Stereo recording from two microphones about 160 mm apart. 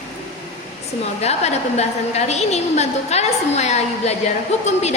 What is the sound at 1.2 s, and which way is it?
A woman's voice, 45° left (ahead or behind).